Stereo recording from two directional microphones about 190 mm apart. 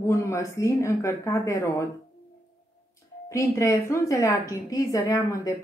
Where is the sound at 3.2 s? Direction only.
15° left (ahead or behind).